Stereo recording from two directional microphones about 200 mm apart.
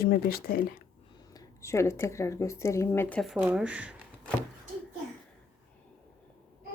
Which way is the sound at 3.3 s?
5° right (ahead or behind).